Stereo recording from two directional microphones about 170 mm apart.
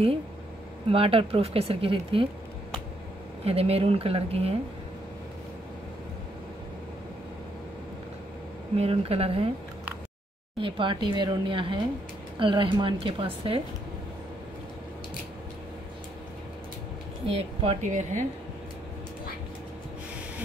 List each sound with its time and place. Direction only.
0.8 s speech: 35° right (ahead or behind)
3.4 s speech: 35° right (ahead or behind)
8.7 s speech: 35° right (ahead or behind)
10.6 s speech: 30° right (ahead or behind)
17.3 s speech: 35° right (ahead or behind)